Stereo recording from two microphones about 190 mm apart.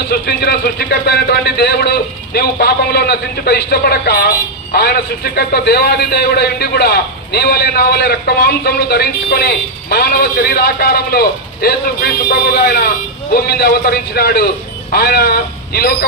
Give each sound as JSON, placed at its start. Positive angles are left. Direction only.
{"t": 0.1, "sound": "a man's voice", "side_deg": 55}